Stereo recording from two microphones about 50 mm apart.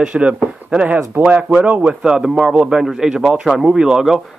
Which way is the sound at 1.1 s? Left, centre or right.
Right.